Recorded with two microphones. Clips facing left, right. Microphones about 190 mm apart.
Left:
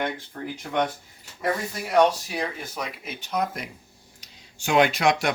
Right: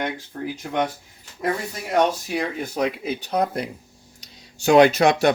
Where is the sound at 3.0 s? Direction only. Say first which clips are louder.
Right 5 dB; 35° right (ahead or behind).